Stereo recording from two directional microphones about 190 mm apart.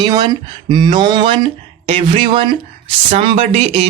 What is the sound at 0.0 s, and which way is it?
Speech, 20° right (ahead or behind).